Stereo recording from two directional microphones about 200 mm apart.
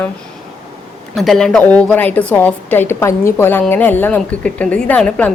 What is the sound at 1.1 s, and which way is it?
A woman's voice, centre (ahead or behind).